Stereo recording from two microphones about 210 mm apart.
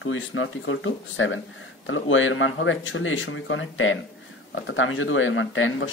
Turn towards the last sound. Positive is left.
turn(degrees=70)  # may be behind; listen again after turning